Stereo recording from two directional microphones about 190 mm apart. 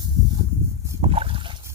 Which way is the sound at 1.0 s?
30° right (ahead or behind).